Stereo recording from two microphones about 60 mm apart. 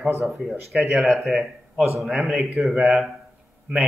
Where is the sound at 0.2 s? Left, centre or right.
Centre.